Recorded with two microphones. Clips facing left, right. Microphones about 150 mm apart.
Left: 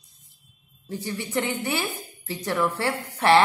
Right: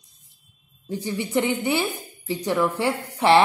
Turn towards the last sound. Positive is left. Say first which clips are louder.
# right 2 dB
turn(degrees=-15)  # may be behind; listen again after turning